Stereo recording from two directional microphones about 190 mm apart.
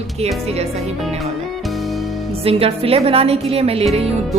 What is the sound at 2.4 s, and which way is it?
Speech, 30° right (ahead or behind).